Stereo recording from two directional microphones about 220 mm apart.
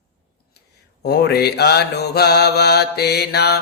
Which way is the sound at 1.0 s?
50° left (ahead or behind).